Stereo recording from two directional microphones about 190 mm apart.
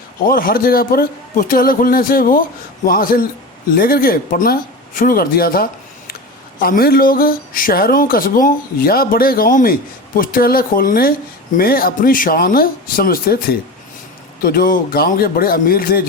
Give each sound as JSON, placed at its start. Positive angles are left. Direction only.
{"t": 0.3, "sound": "speech", "side_deg": 50}